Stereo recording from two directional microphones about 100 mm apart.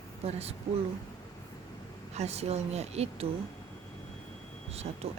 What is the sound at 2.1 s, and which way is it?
Speech, 90° right.